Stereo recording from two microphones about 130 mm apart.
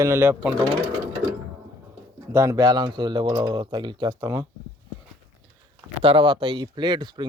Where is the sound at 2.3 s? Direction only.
25° right (ahead or behind).